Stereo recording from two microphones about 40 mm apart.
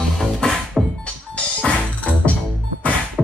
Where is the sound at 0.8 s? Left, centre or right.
Centre.